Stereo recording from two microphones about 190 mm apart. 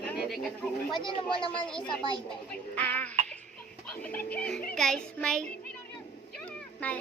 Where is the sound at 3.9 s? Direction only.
10° left (ahead or behind).